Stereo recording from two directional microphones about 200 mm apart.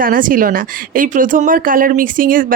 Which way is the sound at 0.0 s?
45° right (ahead or behind).